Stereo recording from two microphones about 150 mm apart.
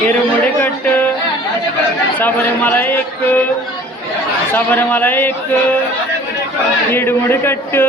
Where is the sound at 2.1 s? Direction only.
10° left (ahead or behind).